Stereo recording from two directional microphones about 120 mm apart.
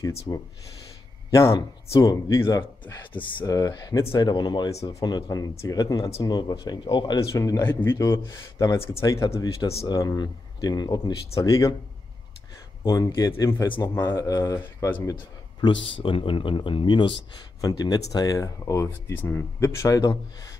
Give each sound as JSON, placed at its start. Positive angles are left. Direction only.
{"t": 0.3, "sound": "speech", "side_deg": 30}
{"t": 4.3, "sound": "speech", "side_deg": 35}
{"t": 7.3, "sound": "speech", "side_deg": 30}
{"t": 8.0, "sound": "speech", "side_deg": 30}
{"t": 12.8, "sound": "speech", "side_deg": 30}
{"t": 14.2, "sound": "speech", "side_deg": 30}
{"t": 15.6, "sound": "speech", "side_deg": 45}
{"t": 17.6, "sound": "speech", "side_deg": 30}